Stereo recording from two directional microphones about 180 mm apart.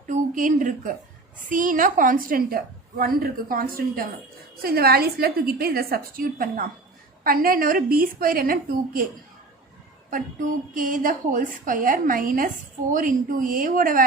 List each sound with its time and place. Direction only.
0.1 s a woman's voice: 45° right (ahead or behind)
10.8 s a woman's voice: 50° right (ahead or behind)